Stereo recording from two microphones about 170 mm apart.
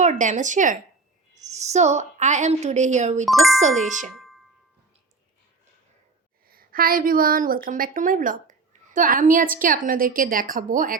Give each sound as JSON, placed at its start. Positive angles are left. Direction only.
{"t": 0.0, "sound": "a woman's voice", "side_deg": -45}
{"t": 3.2, "sound": "speech", "side_deg": 0}
{"t": 3.6, "sound": "speech", "side_deg": -45}
{"t": 6.5, "sound": "a woman's voice", "side_deg": -60}